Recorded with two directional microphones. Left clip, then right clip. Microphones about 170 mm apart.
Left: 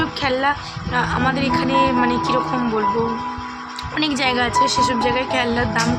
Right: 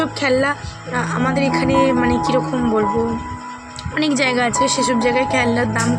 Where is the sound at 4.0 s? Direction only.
15° right (ahead or behind).